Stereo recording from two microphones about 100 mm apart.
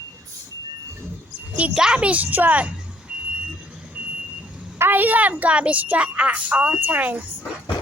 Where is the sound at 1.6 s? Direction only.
10° right (ahead or behind).